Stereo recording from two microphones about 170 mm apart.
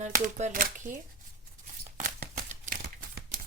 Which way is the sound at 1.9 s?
55° right (ahead or behind).